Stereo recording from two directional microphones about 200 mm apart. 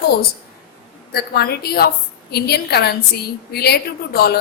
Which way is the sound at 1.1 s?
50° left (ahead or behind).